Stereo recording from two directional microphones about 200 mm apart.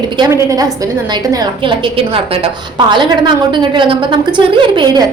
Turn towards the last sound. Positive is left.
turn(degrees=-20)  # may be behind; listen again after turning